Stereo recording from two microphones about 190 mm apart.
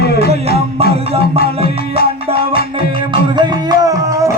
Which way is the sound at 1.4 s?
55° left (ahead or behind).